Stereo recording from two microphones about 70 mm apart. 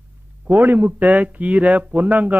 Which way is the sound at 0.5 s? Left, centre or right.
Right.